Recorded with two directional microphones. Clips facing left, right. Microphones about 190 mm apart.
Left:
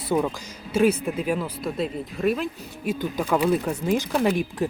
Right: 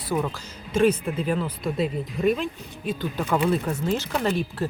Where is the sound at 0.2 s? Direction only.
10° left (ahead or behind).